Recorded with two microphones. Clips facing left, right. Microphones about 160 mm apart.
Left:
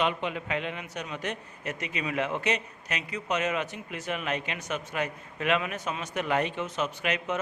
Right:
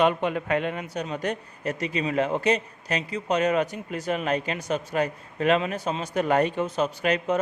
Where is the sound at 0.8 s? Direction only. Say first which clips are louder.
Right 6 dB; 35° right (ahead or behind).